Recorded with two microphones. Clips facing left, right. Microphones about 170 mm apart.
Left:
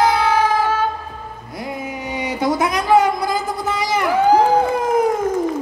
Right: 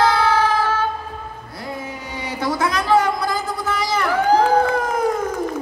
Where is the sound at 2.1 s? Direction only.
20° left (ahead or behind).